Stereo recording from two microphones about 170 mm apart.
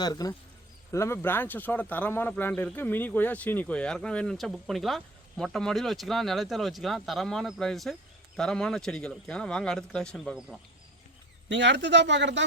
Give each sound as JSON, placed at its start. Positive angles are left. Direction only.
{"t": 0.0, "sound": "speech", "side_deg": 20}
{"t": 11.4, "sound": "speech", "side_deg": -90}